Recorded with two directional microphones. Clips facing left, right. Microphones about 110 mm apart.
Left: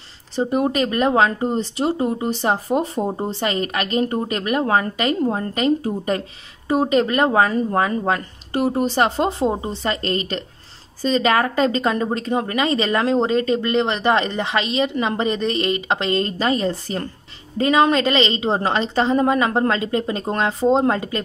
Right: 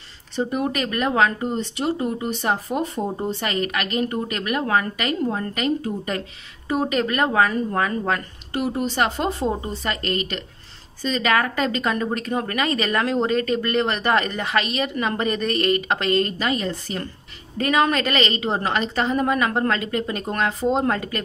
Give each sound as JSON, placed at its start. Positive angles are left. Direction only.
{"t": 0.4, "sound": "a woman's voice", "side_deg": 30}